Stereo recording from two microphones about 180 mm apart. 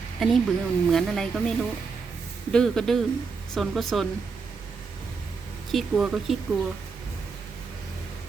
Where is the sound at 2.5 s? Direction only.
5° left (ahead or behind).